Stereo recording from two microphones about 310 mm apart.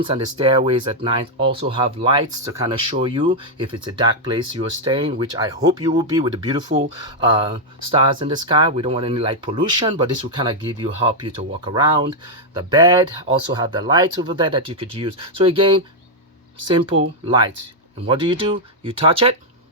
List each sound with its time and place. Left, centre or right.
0.0 s speech: centre